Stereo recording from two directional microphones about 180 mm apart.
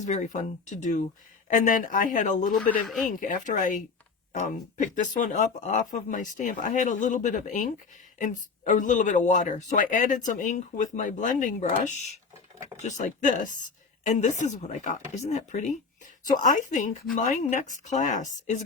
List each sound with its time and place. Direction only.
0.0 s a woman's voice: 40° left (ahead or behind)
2.8 s speech: 5° left (ahead or behind)
3.1 s a woman's voice: 45° left (ahead or behind)